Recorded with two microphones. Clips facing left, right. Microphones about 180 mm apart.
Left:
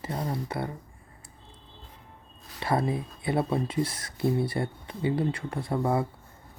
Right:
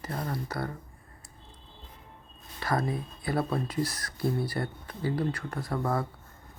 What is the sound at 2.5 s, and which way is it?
Speech, 30° left (ahead or behind).